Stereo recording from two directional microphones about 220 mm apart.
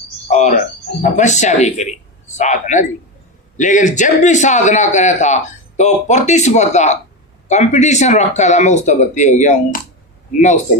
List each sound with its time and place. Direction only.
0.3 s a man's voice: 35° left (ahead or behind)